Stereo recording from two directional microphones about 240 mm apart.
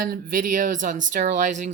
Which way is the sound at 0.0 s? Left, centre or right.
Right.